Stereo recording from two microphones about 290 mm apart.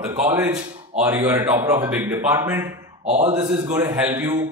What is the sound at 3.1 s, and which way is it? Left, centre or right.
Speech, right.